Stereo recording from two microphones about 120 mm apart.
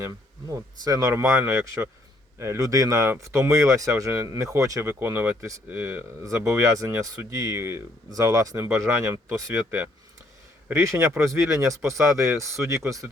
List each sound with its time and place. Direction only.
0.0 s speech: 30° right (ahead or behind)